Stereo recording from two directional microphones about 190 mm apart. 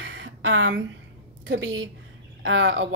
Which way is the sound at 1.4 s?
85° right.